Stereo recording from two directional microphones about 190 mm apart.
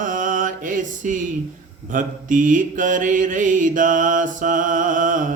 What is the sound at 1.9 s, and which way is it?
Mantra, 45° right (ahead or behind).